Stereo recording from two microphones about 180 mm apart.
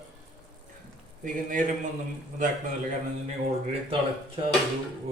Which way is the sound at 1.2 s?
50° right (ahead or behind).